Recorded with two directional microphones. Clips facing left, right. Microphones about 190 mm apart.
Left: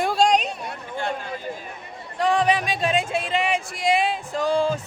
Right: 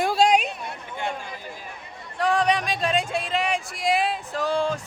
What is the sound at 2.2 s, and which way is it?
Speech, centre (ahead or behind).